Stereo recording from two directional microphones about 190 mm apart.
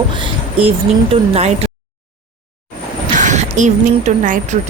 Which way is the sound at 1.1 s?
30° right (ahead or behind).